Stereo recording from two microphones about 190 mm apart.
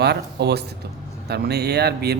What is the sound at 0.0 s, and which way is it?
Speech, 60° right (ahead or behind).